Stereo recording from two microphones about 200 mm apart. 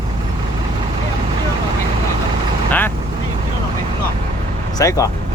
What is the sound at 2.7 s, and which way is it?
Speech, 10° left (ahead or behind).